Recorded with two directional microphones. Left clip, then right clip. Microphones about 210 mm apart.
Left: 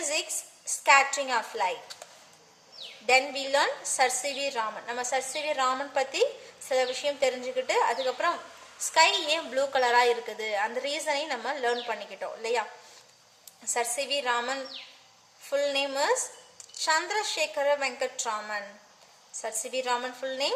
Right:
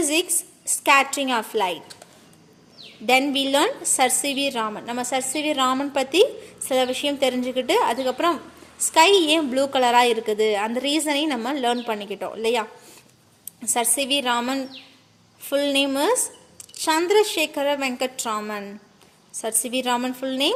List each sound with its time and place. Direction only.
0.0 s a woman's voice: 40° right (ahead or behind)
3.1 s a woman's voice: 40° right (ahead or behind)
13.7 s a woman's voice: 40° right (ahead or behind)